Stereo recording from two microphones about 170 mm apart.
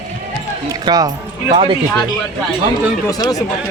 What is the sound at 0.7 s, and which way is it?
Speech, 20° right (ahead or behind).